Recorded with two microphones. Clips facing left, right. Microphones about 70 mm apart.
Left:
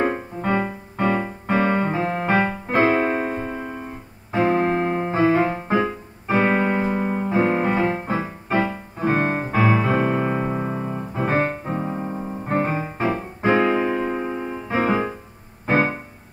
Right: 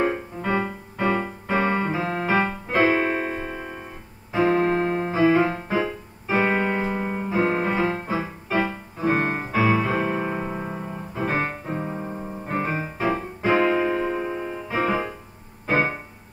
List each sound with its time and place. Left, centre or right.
0.0 s music: left
1.5 s keyboard: left
4.5 s music: left
5.1 s keyboard: left
6.4 s music: left
10.6 s keyboard: left
11.1 s music: left; by 14.5 s centre
14.7 s music: left
15.6 s keyboard: left